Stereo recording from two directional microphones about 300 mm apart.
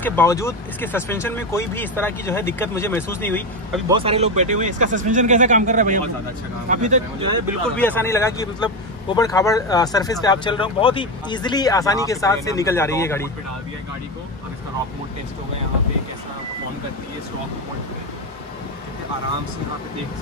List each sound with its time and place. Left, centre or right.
0.0 s speech: centre
3.9 s speech: centre
7.7 s speech: centre